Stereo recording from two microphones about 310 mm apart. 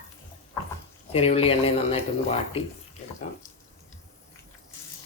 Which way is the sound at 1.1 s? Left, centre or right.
Centre.